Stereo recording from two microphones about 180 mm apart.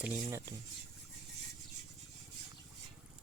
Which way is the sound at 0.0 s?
15° right (ahead or behind).